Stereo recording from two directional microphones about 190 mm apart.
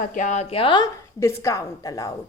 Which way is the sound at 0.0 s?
45° left (ahead or behind).